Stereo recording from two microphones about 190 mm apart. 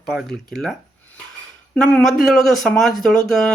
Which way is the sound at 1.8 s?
5° left (ahead or behind).